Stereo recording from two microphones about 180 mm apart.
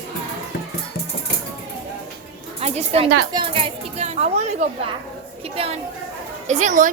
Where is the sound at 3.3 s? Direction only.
25° right (ahead or behind).